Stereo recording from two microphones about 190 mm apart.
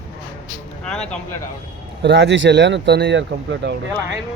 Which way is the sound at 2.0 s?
70° right (ahead or behind).